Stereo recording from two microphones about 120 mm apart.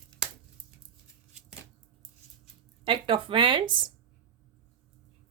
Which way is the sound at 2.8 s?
45° right (ahead or behind).